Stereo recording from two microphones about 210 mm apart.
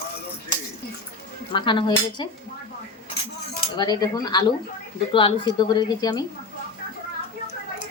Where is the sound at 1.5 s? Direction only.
25° left (ahead or behind).